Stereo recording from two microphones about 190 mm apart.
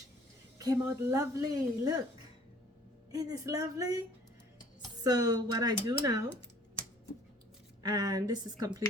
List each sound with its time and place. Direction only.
0.6 s speech: 15° right (ahead or behind)
3.1 s speech: 20° right (ahead or behind)
5.0 s speech: 20° right (ahead or behind)
7.8 s speech: 20° right (ahead or behind)